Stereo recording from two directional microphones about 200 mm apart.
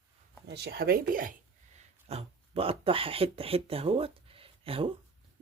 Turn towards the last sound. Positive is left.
turn(degrees=-25)  # may be behind; listen again after turning